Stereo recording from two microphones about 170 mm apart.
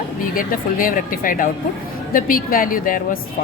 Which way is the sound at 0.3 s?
55° left (ahead or behind).